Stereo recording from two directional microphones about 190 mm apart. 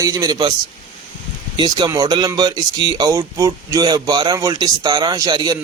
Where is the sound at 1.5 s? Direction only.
20° right (ahead or behind).